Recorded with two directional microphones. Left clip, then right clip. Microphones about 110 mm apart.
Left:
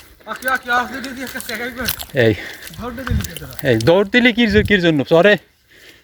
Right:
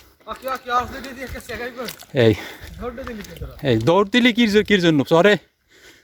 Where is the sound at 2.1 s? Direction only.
75° right (ahead or behind).